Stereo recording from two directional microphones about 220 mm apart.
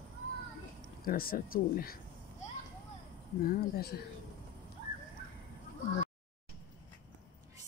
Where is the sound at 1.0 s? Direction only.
40° left (ahead or behind).